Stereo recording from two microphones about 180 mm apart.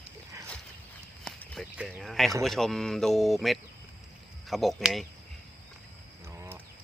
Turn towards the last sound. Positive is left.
turn(degrees=0)  # may be behind; listen again after turning